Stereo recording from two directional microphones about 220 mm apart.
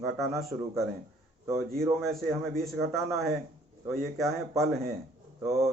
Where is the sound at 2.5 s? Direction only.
40° right (ahead or behind).